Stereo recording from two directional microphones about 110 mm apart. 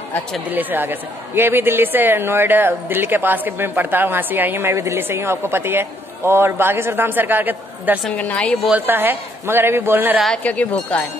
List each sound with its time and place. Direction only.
0.5 s a woman's voice: 15° right (ahead or behind)
8.2 s speech: 15° left (ahead or behind)
8.6 s a woman's voice: 15° right (ahead or behind)
10.1 s speech: centre (ahead or behind)
10.4 s speech: 10° left (ahead or behind)